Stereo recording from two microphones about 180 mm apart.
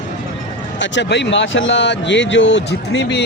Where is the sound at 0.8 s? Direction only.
80° left.